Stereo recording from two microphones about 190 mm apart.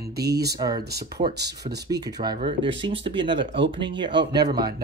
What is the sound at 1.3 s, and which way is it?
Speech, 60° right (ahead or behind).